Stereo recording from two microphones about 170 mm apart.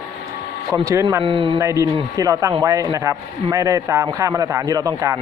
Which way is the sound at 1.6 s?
15° right (ahead or behind).